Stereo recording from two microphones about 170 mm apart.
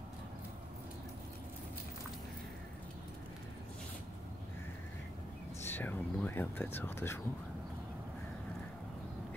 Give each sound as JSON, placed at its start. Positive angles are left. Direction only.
{"t": 5.6, "sound": "speech", "side_deg": 10}